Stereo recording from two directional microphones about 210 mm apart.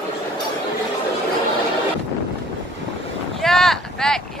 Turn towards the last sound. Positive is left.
turn(degrees=0)  # may be behind; listen again after turning